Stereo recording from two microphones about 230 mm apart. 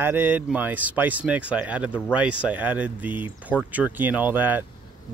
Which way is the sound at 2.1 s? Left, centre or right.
Centre.